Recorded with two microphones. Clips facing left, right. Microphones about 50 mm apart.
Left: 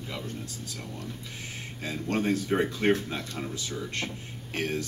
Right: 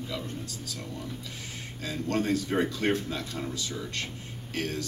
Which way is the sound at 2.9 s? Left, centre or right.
Left.